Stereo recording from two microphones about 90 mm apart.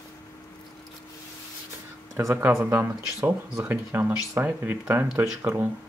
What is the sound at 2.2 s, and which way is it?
Speech, 30° right (ahead or behind).